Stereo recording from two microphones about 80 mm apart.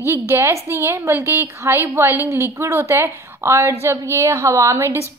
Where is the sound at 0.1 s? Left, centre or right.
Right.